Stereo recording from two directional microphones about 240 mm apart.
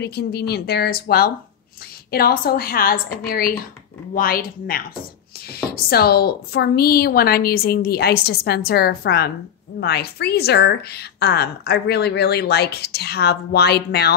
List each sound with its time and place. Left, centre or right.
0.0 s a woman's voice: left